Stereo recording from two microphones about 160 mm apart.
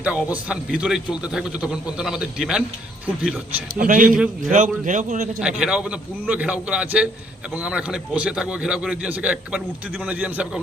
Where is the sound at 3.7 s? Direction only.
55° right (ahead or behind).